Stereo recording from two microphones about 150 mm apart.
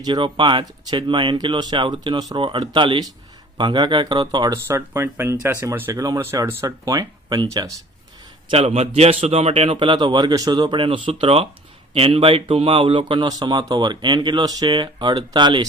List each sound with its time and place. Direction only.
0.0 s speech: 35° right (ahead or behind)
8.4 s speech: 40° right (ahead or behind)